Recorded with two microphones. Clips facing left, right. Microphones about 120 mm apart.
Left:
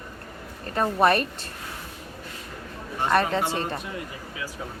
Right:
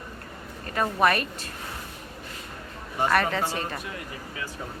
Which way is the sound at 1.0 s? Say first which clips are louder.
Left 3 dB; 30° left (ahead or behind).